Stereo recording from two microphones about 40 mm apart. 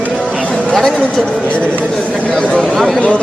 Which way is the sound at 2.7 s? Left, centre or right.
Centre.